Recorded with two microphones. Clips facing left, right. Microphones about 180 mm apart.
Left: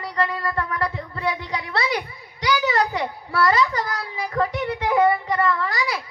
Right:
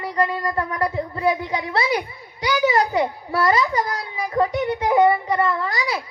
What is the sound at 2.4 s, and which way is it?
A child's voice, 20° right (ahead or behind).